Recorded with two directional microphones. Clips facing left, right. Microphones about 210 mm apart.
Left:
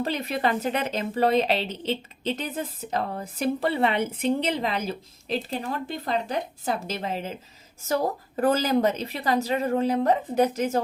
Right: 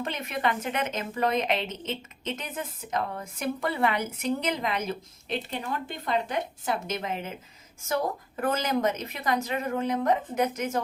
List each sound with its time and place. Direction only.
0.0 s speech: 35° left (ahead or behind)